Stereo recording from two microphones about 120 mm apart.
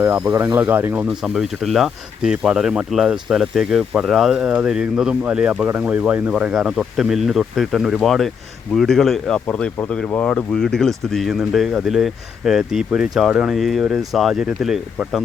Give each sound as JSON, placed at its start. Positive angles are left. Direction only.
{"t": 0.3, "sound": "speech", "side_deg": -25}
{"t": 1.0, "sound": "speech", "side_deg": 0}